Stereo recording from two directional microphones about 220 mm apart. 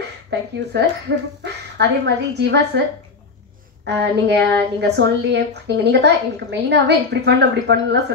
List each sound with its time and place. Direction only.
0.0 s speech: 50° right (ahead or behind)
3.8 s a woman's voice: 50° right (ahead or behind)